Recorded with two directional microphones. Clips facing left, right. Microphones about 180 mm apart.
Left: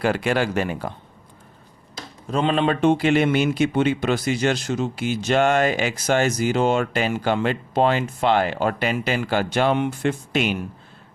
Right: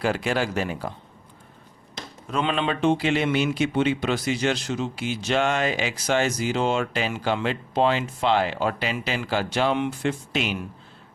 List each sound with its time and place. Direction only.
0.0 s speech: 60° left (ahead or behind)
2.2 s speech: 35° left (ahead or behind)